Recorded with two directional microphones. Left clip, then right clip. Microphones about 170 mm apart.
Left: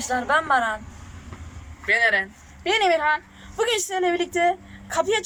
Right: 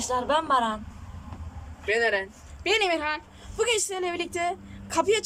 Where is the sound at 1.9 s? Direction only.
35° right (ahead or behind).